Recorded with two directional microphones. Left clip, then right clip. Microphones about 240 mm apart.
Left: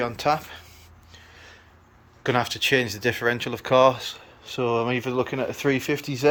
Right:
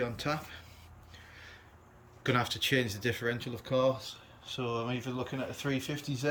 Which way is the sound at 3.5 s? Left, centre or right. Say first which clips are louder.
Left 12 dB; left.